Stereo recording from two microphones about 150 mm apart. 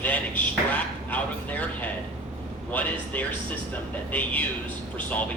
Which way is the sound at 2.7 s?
10° left (ahead or behind).